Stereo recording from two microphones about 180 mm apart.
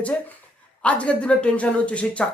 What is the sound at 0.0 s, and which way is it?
Speech, 5° left (ahead or behind).